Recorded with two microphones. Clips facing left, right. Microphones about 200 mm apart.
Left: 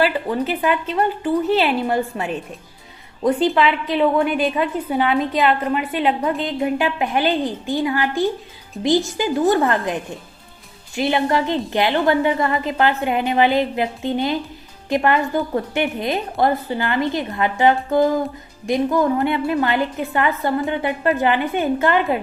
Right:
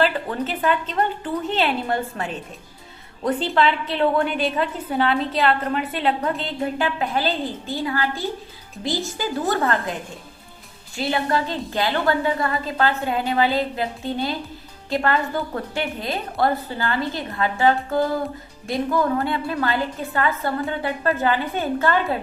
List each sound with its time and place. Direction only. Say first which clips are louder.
0.0 s a woman's voice: left 3 dB; 10° left (ahead or behind)